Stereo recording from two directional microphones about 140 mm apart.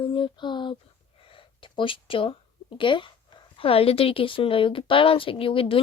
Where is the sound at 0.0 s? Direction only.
35° left (ahead or behind).